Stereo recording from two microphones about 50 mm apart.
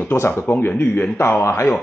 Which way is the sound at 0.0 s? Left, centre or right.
Left.